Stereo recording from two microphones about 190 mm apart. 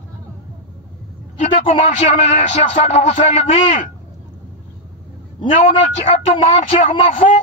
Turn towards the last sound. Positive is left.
turn(degrees=45)  # may be behind; listen again after turning